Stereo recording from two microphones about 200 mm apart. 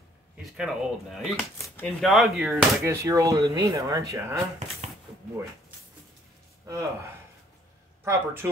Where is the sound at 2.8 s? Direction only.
15° right (ahead or behind).